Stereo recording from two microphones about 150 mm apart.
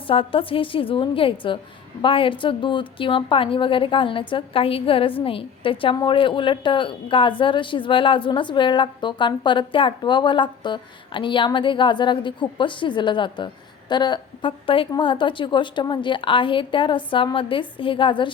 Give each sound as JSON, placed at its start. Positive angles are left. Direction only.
{"t": 0.1, "sound": "a woman's voice", "side_deg": 35}